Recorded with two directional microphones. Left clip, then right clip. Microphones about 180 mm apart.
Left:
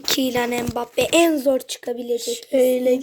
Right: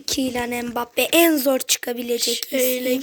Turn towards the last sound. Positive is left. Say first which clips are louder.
# left 4 dB
turn(degrees=40)  # may be behind; listen again after turning